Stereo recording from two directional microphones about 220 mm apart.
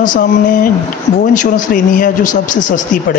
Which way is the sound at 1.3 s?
35° left (ahead or behind).